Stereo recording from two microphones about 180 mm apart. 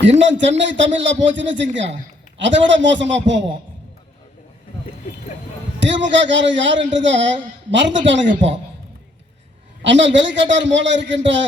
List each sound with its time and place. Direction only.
0.2 s a woman's voice: 85° right
5.8 s a man's voice: 90° right
8.3 s a woman's voice: 40° right (ahead or behind)
9.8 s a woman's voice: 90° right